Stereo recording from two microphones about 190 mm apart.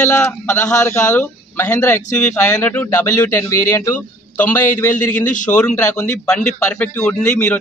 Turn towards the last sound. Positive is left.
turn(degrees=10)  # may be behind; listen again after turning